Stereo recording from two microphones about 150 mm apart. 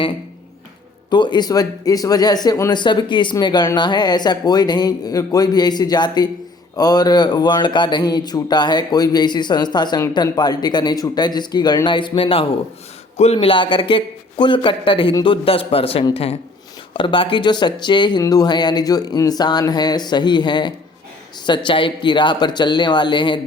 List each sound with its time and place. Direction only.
1.1 s speech: 30° left (ahead or behind)